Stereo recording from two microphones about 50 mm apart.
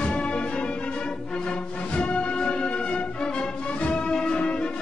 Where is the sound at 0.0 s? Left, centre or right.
Left.